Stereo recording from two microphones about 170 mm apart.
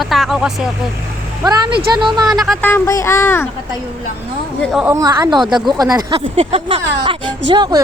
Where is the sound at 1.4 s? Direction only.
25° right (ahead or behind).